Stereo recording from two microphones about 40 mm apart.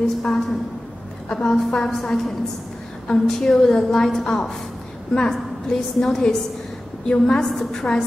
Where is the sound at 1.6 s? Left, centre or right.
Centre.